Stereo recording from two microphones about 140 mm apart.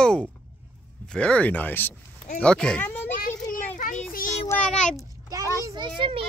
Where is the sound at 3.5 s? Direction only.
75° left (ahead or behind).